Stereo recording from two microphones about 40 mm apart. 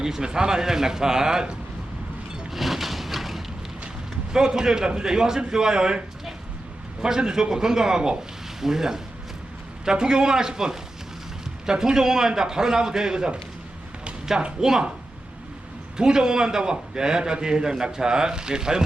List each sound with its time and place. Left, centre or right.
0.0 s a man's voice: centre
2.5 s a sound: centre
4.3 s a man's voice: centre
7.0 s a man's voice: centre
14.6 s a man's voice: centre
16.0 s a man's voice: centre